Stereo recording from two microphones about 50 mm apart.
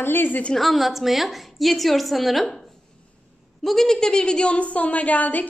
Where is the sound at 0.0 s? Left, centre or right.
Left.